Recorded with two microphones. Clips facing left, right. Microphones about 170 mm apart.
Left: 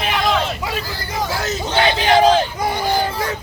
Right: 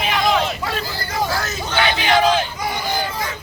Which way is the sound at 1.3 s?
25° left (ahead or behind).